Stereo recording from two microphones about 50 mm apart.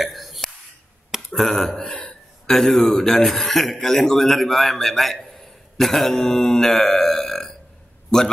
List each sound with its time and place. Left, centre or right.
0.0 s throat clearing: centre
1.3 s speech: centre
1.8 s speech: left
2.4 s a man's voice: centre